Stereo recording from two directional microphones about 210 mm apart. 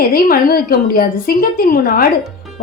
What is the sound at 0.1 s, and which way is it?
A woman's voice, 45° left (ahead or behind).